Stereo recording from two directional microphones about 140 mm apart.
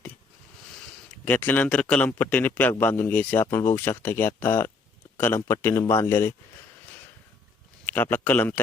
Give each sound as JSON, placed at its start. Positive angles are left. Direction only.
{"t": 1.2, "sound": "a man's voice", "side_deg": 10}
{"t": 7.9, "sound": "a man's voice", "side_deg": 15}